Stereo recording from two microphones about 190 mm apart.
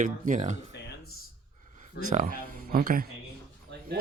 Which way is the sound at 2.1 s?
45° right (ahead or behind).